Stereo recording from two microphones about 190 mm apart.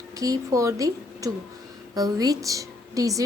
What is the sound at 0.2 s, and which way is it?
A woman's voice, 15° right (ahead or behind).